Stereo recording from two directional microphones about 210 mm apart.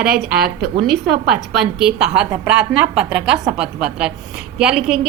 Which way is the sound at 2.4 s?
5° right (ahead or behind).